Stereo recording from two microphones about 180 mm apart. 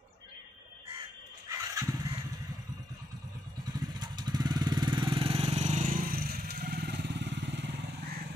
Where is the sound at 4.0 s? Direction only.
25° right (ahead or behind); by 7.7 s 75° right (ahead or behind).